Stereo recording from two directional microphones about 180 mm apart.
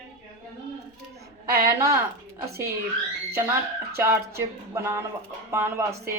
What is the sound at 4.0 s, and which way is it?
A woman's voice, 15° right (ahead or behind).